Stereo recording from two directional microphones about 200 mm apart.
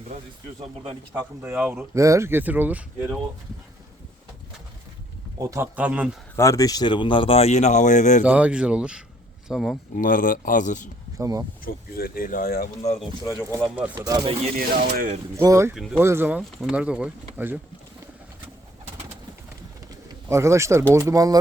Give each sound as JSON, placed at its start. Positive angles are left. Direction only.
{"t": 1.2, "sound": "speech", "side_deg": -10}
{"t": 5.4, "sound": "speech", "side_deg": -15}
{"t": 6.3, "sound": "speech", "side_deg": 15}
{"t": 8.2, "sound": "speech", "side_deg": -5}
{"t": 9.9, "sound": "speech", "side_deg": 45}
{"t": 11.2, "sound": "speech", "side_deg": -20}
{"t": 11.6, "sound": "speech", "side_deg": 45}
{"t": 13.6, "sound": "speech", "side_deg": -5}
{"t": 13.9, "sound": "speech", "side_deg": -15}
{"t": 14.5, "sound": "speech", "side_deg": -45}
{"t": 15.4, "sound": "speech", "side_deg": -15}
{"t": 15.7, "sound": "speech", "side_deg": 0}
{"t": 16.0, "sound": "speech", "side_deg": -10}
{"t": 20.1, "sound": "speech", "side_deg": -15}